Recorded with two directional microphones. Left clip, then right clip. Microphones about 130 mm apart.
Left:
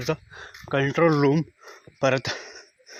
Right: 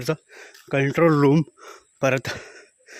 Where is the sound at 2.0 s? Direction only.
45° right (ahead or behind).